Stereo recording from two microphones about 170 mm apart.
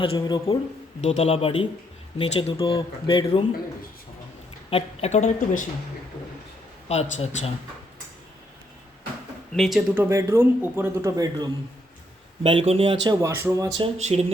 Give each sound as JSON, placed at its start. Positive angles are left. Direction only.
{"t": 0.0, "sound": "speech", "side_deg": 30}
{"t": 4.7, "sound": "speech", "side_deg": 40}
{"t": 6.8, "sound": "speech", "side_deg": 40}
{"t": 9.5, "sound": "speech", "side_deg": 0}
{"t": 10.0, "sound": "speech", "side_deg": -15}
{"t": 12.4, "sound": "speech", "side_deg": -35}
{"t": 13.1, "sound": "speech", "side_deg": -15}
{"t": 14.0, "sound": "speech", "side_deg": -40}